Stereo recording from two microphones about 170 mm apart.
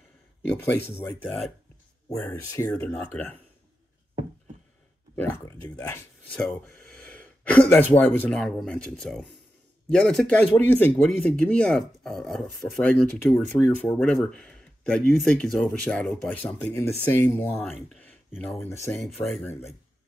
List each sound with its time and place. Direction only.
1.0 s speech: 5° left (ahead or behind)
2.5 s speech: 15° left (ahead or behind)
5.1 s speech: 15° left (ahead or behind)
6.3 s speech: 5° left (ahead or behind)